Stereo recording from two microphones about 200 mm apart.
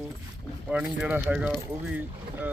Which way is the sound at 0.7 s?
5° right (ahead or behind).